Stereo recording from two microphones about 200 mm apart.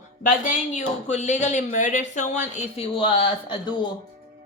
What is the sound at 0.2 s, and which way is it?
Speech, 40° left (ahead or behind).